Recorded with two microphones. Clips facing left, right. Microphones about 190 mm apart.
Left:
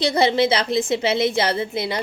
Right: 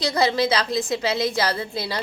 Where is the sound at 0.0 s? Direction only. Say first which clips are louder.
Left 3 dB; 25° left (ahead or behind).